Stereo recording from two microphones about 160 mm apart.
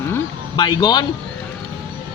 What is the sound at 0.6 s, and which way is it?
Speech, 25° left (ahead or behind).